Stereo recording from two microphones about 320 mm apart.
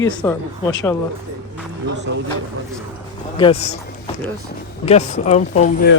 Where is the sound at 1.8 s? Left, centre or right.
Right.